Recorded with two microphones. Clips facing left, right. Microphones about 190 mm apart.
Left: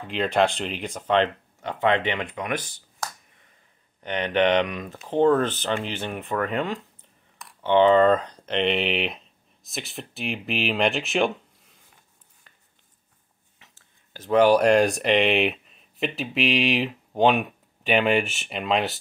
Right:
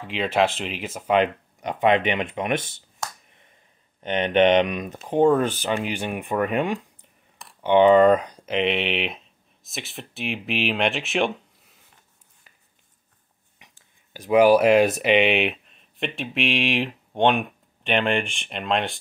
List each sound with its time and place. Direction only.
0.0 s speech: centre (ahead or behind); by 2.8 s 25° right (ahead or behind)
4.0 s speech: 20° right (ahead or behind); by 11.3 s centre (ahead or behind)
13.6 s speech: 15° right (ahead or behind); by 18.9 s 5° left (ahead or behind)